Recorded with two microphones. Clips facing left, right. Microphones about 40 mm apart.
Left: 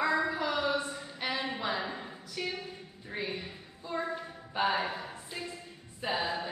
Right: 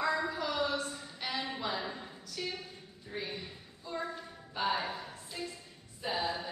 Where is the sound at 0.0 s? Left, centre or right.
Centre.